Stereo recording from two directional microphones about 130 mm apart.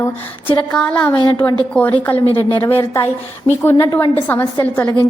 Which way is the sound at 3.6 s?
25° left (ahead or behind).